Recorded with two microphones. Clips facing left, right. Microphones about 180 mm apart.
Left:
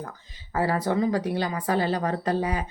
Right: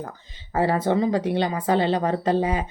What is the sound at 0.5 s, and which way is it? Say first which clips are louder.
A woman's voice: right 3 dB; 25° right (ahead or behind).